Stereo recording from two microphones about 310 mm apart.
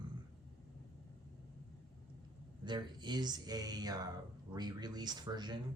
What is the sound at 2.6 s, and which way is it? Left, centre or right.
Speech, centre.